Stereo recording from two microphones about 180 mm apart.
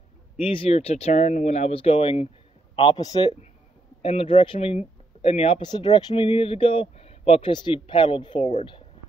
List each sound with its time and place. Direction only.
0.4 s speech: 30° left (ahead or behind)
8.4 s speech: 40° left (ahead or behind)